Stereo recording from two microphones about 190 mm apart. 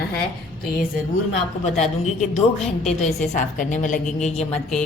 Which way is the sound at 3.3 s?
40° left (ahead or behind).